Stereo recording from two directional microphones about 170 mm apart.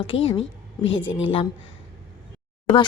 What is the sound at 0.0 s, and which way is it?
Speech, 30° left (ahead or behind).